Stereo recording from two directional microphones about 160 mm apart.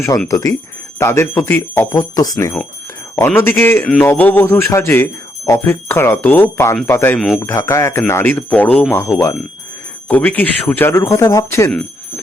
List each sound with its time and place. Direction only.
0.3 s a man's voice: 20° left (ahead or behind)